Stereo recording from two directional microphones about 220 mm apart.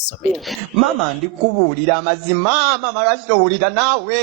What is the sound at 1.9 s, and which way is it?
A man's voice, centre (ahead or behind).